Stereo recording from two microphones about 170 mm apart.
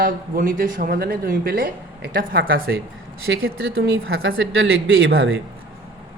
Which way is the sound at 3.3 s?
90° right.